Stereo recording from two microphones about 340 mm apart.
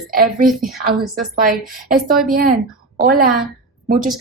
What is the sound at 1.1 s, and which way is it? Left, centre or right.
A woman's voice, right.